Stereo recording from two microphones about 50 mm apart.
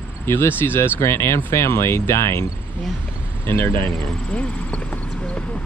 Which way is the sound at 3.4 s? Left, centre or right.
Left.